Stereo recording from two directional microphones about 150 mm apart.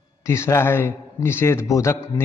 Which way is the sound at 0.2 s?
20° left (ahead or behind).